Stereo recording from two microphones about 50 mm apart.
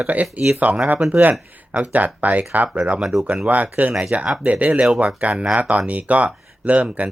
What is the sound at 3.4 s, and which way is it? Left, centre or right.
Speech, right.